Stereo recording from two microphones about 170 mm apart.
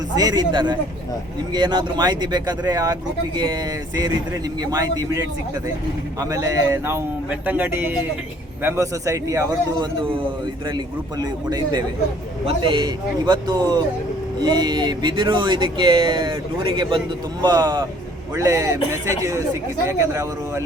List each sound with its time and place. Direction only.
0.2 s a man's voice: 25° right (ahead or behind)
19.9 s a man's voice: 15° right (ahead or behind)